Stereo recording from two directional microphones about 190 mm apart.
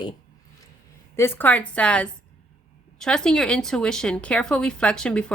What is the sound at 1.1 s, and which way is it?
A woman's voice, 10° left (ahead or behind).